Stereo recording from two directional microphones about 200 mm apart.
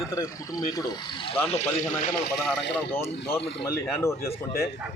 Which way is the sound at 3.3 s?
50° left (ahead or behind).